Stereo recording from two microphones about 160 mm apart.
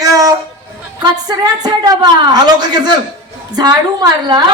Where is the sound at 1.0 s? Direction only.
25° right (ahead or behind).